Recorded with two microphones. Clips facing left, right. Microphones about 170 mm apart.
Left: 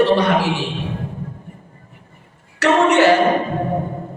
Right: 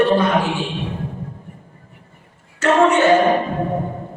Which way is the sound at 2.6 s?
75° left (ahead or behind).